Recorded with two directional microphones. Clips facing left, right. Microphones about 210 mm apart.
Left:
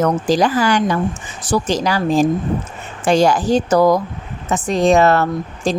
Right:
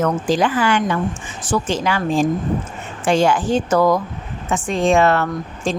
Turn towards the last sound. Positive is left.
turn(degrees=40)  # may be behind; listen again after turning